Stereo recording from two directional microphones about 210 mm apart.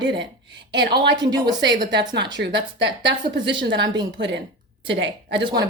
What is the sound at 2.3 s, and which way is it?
A woman's voice, 55° right (ahead or behind).